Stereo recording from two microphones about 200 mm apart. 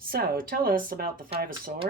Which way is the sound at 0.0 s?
50° right (ahead or behind).